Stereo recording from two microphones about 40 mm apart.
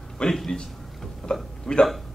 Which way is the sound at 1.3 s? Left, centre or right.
Centre.